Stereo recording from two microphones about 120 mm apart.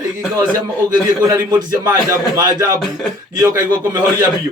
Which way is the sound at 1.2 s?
30° right (ahead or behind).